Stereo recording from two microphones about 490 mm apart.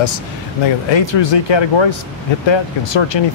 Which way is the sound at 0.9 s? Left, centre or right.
Left.